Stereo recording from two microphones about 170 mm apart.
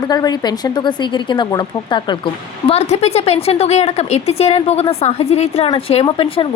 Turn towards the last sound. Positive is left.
turn(degrees=30)  # may be behind; listen again after turning